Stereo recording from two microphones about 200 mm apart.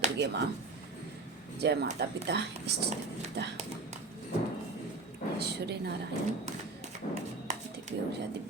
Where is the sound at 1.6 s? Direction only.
55° right (ahead or behind).